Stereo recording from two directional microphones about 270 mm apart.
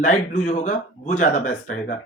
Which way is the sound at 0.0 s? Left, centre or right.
Left.